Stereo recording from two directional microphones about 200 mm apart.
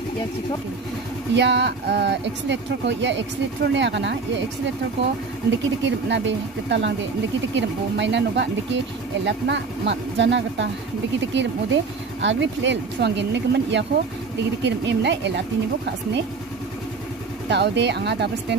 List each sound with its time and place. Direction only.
1.3 s speech: 60° right (ahead or behind)
5.9 s speech: 65° right (ahead or behind)
17.5 s speech: 60° right (ahead or behind)